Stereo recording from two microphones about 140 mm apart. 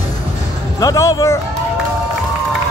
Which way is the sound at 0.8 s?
25° left (ahead or behind).